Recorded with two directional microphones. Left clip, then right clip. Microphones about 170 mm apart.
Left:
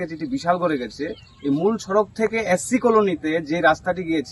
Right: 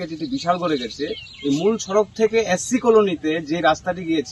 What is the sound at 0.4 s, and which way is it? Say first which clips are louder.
Speech: even; 15° left (ahead or behind).